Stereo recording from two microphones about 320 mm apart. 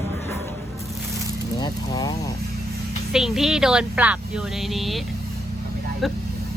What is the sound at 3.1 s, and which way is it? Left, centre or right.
Speech, centre.